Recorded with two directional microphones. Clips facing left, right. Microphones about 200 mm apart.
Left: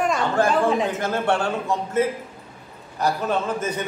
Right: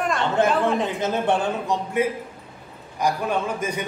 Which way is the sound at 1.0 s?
20° right (ahead or behind).